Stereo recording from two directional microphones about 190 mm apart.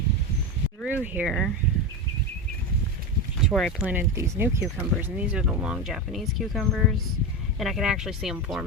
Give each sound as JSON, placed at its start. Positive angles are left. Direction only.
{"t": 0.9, "sound": "speech", "side_deg": -10}
{"t": 3.5, "sound": "speech", "side_deg": 0}
{"t": 3.8, "sound": "speech", "side_deg": -10}